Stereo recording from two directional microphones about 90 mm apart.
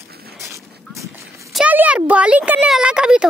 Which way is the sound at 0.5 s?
35° right (ahead or behind).